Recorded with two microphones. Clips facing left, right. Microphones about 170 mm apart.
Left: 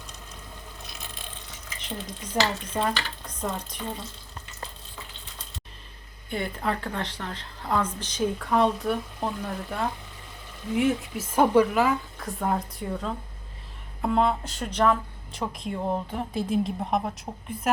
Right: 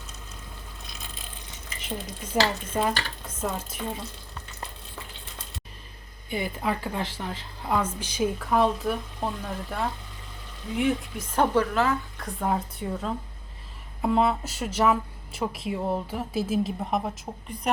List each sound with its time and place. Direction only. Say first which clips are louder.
0.9 s ratchet: right 1 dB; centre (ahead or behind)
2.3 s a woman's voice: right 1 dB; 5° right (ahead or behind)
6.3 s a woman's voice: even; 5° right (ahead or behind)